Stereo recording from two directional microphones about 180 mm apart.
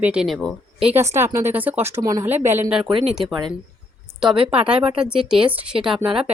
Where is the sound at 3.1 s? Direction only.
Centre (ahead or behind).